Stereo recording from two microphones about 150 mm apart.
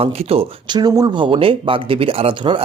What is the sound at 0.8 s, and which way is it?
Speech, 25° right (ahead or behind).